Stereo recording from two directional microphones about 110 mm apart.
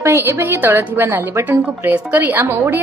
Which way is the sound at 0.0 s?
25° right (ahead or behind).